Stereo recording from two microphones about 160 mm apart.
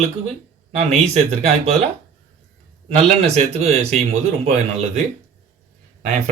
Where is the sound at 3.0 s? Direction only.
40° right (ahead or behind).